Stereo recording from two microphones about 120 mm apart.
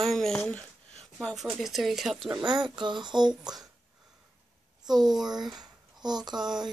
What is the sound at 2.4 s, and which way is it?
Speech, 40° right (ahead or behind).